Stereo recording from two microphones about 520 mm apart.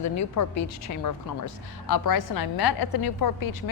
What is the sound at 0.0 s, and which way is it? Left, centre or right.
A woman's voice, left.